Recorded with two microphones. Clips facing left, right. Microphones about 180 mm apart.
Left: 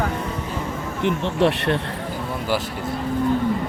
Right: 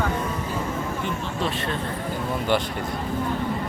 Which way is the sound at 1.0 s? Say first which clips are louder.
Left 8 dB; 70° left (ahead or behind).